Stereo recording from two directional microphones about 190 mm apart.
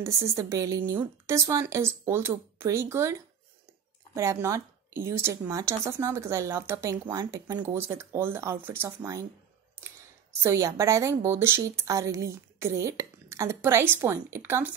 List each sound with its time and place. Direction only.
0.0 s a woman's voice: 15° right (ahead or behind)
10.4 s a woman's voice: 15° right (ahead or behind)